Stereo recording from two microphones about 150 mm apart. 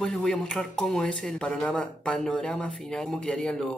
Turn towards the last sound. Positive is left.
turn(degrees=5)  # may be behind; listen again after turning